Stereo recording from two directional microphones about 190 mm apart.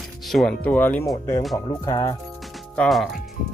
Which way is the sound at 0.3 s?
5° left (ahead or behind).